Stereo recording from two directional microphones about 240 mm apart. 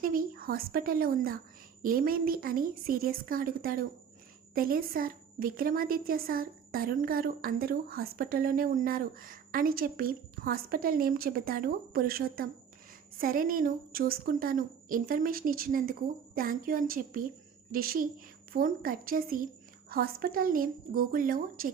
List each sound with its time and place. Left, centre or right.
0.0 s a woman's voice: right